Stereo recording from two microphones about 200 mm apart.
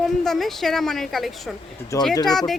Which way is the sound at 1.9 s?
15° left (ahead or behind).